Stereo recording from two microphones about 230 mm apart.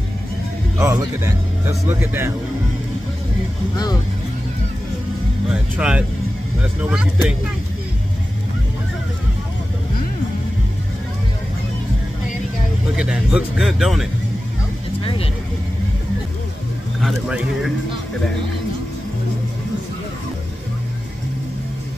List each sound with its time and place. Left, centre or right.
0.7 s speech: centre
3.7 s speech: centre
5.5 s speech: centre
12.9 s speech: centre